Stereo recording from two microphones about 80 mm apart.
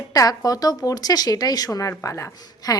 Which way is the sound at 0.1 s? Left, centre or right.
Left.